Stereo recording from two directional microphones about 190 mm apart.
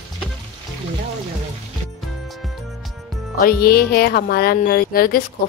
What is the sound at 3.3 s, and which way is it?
Speech, 55° left (ahead or behind).